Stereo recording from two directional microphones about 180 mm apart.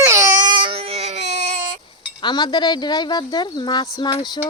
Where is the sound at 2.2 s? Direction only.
25° left (ahead or behind).